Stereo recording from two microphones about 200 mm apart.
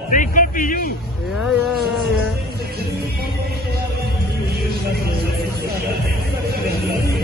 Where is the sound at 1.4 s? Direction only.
Centre (ahead or behind).